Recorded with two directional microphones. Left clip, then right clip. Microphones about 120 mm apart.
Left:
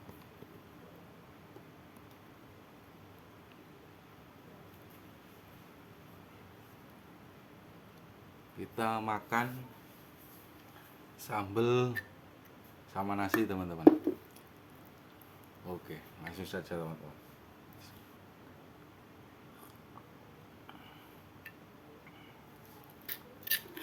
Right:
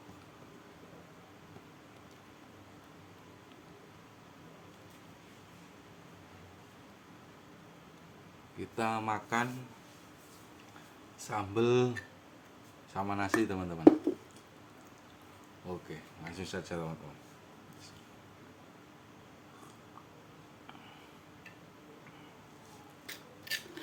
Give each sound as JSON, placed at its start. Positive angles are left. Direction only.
{"t": 8.5, "sound": "speech", "side_deg": 0}
{"t": 11.3, "sound": "speech", "side_deg": 10}
{"t": 15.6, "sound": "speech", "side_deg": 20}
{"t": 16.3, "sound": "speech", "side_deg": 0}
{"t": 16.6, "sound": "speech", "side_deg": -15}
{"t": 23.0, "sound": "scissors", "side_deg": 20}